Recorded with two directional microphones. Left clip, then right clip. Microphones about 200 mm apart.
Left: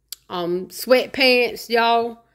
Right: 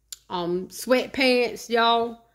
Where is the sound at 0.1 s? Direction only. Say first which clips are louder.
Left 3 dB; 10° left (ahead or behind).